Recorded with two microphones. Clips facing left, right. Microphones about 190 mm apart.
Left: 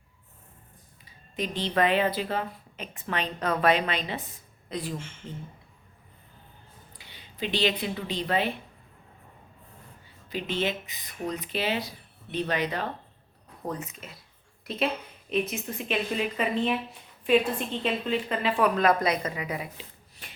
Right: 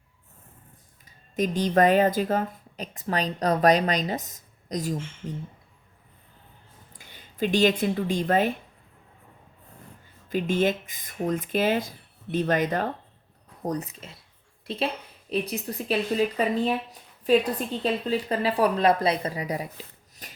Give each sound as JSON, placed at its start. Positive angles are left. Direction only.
{"t": 1.0, "sound": "speech", "side_deg": -45}
{"t": 6.9, "sound": "a woman's voice", "side_deg": -45}
{"t": 10.2, "sound": "speech", "side_deg": -45}
{"t": 14.6, "sound": "a sound", "side_deg": -30}
{"t": 15.3, "sound": "speech", "side_deg": -35}